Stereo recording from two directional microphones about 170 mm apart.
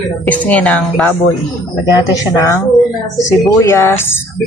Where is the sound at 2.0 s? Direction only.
20° left (ahead or behind).